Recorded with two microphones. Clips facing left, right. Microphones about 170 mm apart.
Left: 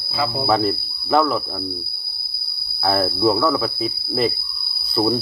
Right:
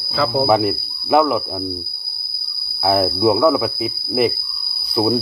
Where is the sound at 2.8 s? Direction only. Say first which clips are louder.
Right 3 dB; 15° right (ahead or behind).